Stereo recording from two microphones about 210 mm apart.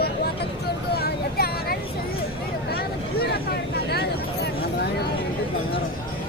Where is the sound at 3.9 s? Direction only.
50° left (ahead or behind).